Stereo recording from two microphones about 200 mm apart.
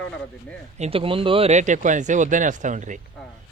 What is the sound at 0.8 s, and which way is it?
Speech, 30° right (ahead or behind).